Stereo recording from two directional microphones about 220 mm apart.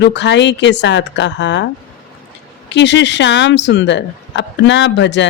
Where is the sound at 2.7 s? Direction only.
55° left (ahead or behind).